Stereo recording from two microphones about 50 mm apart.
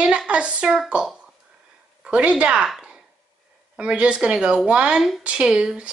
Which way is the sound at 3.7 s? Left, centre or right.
Right.